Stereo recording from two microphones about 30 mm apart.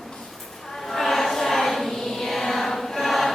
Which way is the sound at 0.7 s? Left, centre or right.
Centre.